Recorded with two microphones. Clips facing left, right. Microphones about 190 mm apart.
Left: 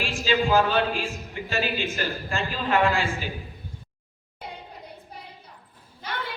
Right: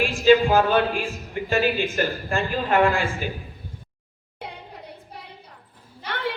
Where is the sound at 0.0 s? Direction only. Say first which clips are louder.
Right 8 dB; 55° right (ahead or behind).